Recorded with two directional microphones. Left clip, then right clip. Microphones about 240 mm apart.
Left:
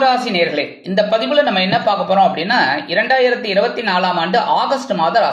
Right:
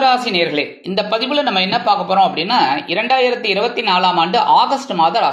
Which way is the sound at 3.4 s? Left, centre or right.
Right.